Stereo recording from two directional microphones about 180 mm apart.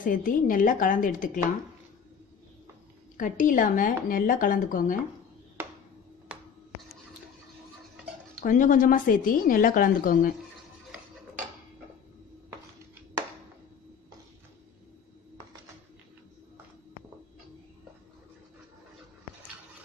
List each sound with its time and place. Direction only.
0.0 s a woman's voice: 50° left (ahead or behind)
3.2 s a woman's voice: 45° left (ahead or behind)
8.5 s a woman's voice: 50° left (ahead or behind)